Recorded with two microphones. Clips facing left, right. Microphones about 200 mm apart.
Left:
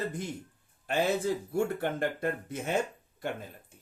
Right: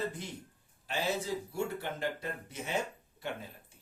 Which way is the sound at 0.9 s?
55° left (ahead or behind).